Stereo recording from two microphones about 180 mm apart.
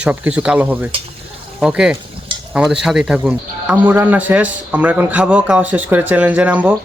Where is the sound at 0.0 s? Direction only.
5° right (ahead or behind).